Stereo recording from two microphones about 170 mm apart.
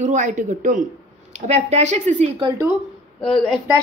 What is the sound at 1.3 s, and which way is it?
A woman's voice, 40° right (ahead or behind).